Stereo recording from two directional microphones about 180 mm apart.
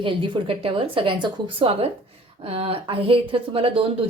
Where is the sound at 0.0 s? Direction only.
30° right (ahead or behind).